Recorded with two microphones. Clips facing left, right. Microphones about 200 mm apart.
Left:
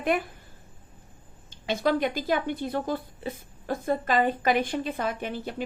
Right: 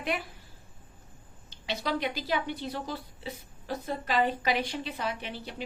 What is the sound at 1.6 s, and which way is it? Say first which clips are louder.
A woman's voice: left 6 dB; 50° left (ahead or behind).